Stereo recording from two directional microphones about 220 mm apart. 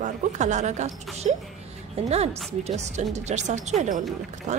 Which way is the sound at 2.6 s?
30° right (ahead or behind).